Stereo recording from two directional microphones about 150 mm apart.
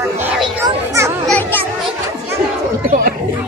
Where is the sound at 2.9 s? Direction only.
70° right (ahead or behind).